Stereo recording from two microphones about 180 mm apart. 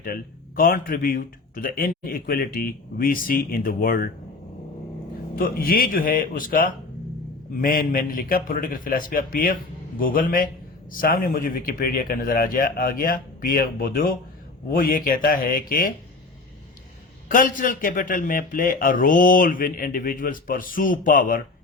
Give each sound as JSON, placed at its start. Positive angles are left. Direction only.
{"t": 0.0, "sound": "a man's voice", "side_deg": 55}
{"t": 5.4, "sound": "a man's voice", "side_deg": 55}
{"t": 17.2, "sound": "a man's voice", "side_deg": 50}